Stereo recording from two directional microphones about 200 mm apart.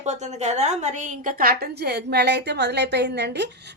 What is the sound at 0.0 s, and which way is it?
A woman's voice, 35° right (ahead or behind).